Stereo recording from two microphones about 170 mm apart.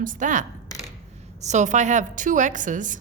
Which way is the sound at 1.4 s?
45° right (ahead or behind).